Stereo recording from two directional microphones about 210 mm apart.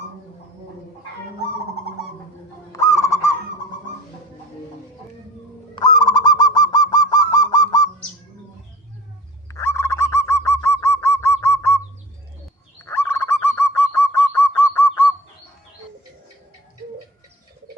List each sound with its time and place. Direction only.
2.7 s goose: 15° left (ahead or behind)
5.7 s goose: 20° left (ahead or behind)
9.5 s goose: 10° left (ahead or behind)
12.8 s goose: 10° left (ahead or behind)